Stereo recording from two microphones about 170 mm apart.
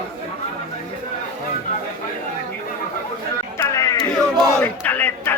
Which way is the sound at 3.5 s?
20° left (ahead or behind).